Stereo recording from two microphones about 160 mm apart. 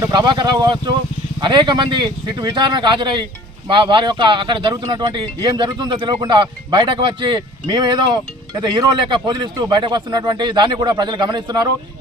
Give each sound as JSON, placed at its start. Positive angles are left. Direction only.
{"t": 0.0, "sound": "speech", "side_deg": -25}